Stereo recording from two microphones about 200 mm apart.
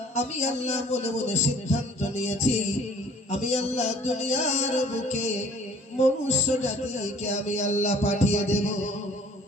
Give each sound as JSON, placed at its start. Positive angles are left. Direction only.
{"t": 0.1, "sound": "a man's voice", "side_deg": 35}